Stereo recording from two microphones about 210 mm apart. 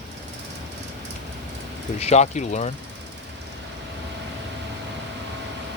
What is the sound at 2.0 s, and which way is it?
Speech, 30° left (ahead or behind).